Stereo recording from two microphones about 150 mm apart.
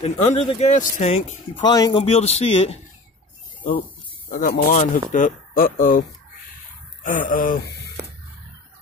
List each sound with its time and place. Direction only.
0.0 s speech: 45° left (ahead or behind)
1.6 s a man's voice: 25° left (ahead or behind)
2.0 s speech: 45° left (ahead or behind)
4.3 s speech: 80° left